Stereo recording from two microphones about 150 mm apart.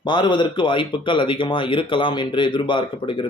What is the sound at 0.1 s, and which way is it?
Speech, 30° left (ahead or behind).